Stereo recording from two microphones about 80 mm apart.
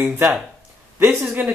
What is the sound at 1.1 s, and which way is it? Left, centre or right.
Speech, centre.